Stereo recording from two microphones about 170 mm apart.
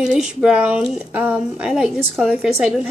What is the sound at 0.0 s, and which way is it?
Speech, 5° right (ahead or behind).